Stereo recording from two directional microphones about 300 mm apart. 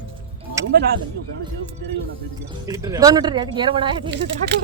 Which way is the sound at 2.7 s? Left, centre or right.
Centre.